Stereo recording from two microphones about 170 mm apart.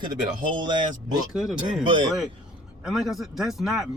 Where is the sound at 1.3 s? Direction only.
Centre (ahead or behind).